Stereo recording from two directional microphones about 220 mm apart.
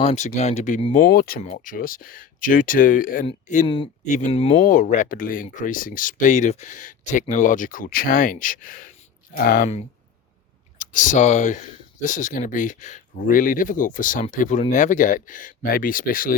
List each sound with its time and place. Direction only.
0.0 s speech: 30° left (ahead or behind)
1.0 s speech: 40° left (ahead or behind)
3.2 s speech: 30° left (ahead or behind)